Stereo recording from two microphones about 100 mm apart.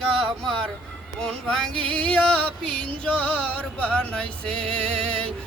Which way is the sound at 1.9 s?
10° left (ahead or behind).